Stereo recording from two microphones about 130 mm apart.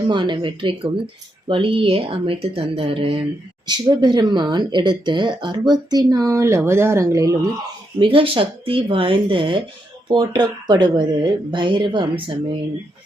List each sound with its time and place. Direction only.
0.1 s a woman's voice: 35° right (ahead or behind)
7.9 s speech: 45° right (ahead or behind)